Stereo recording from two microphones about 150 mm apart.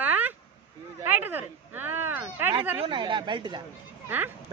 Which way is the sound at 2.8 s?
30° right (ahead or behind).